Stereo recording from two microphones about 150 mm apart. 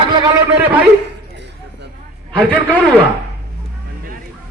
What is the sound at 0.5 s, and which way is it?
Speech, 10° right (ahead or behind).